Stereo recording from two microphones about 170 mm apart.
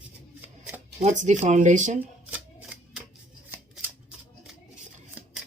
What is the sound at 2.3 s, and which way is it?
Shuffling cards, 10° right (ahead or behind).